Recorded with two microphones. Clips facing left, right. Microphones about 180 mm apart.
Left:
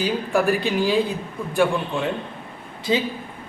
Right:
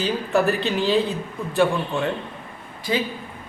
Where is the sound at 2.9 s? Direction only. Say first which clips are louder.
Left 2 dB; 20° left (ahead or behind).